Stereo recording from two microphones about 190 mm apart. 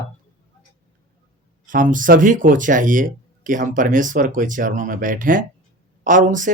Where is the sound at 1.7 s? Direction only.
45° right (ahead or behind).